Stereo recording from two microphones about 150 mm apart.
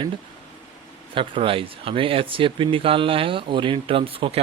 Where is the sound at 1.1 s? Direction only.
35° right (ahead or behind).